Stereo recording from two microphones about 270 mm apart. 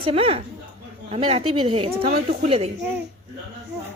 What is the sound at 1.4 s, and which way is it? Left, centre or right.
Speech, right.